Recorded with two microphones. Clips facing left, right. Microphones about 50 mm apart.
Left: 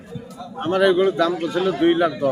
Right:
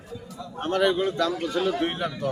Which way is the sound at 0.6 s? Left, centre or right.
Centre.